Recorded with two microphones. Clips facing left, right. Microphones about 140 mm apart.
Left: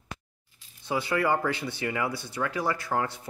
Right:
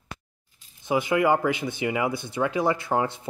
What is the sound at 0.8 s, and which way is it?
Speech, 20° right (ahead or behind).